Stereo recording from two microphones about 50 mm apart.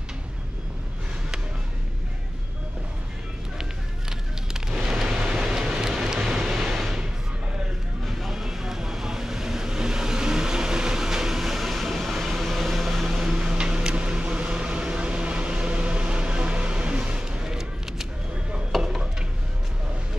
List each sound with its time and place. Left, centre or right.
5.2 s vehicle: centre
6.7 s music: centre
8.0 s vehicle: centre
13.2 s a sound: centre
18.7 s stir: centre